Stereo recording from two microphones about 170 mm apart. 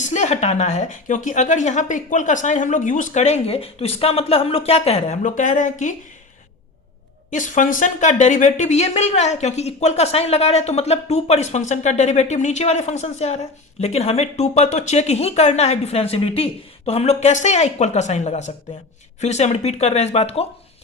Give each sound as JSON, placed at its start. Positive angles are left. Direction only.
{"t": 0.0, "sound": "a woman's voice", "side_deg": 45}
{"t": 7.3, "sound": "speech", "side_deg": 50}